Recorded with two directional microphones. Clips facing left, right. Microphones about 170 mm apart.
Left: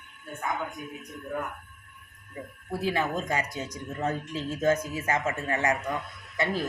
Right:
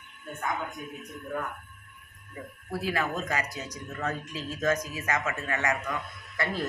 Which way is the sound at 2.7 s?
25° left (ahead or behind).